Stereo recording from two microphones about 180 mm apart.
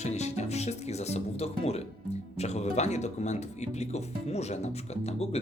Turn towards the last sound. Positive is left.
turn(degrees=35)  # may be behind; listen again after turning